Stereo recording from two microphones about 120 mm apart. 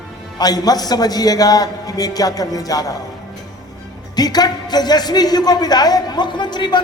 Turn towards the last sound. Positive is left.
turn(degrees=40)  # may be behind; listen again after turning